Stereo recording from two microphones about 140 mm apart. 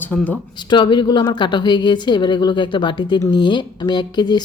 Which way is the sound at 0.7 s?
35° left (ahead or behind).